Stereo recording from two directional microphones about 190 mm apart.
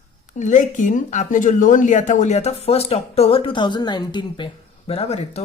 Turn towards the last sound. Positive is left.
turn(degrees=35)  # may be behind; listen again after turning